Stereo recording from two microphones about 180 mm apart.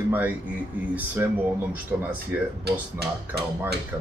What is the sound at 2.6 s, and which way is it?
Music, 65° right (ahead or behind).